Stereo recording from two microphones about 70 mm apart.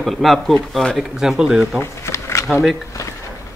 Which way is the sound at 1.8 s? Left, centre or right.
Left.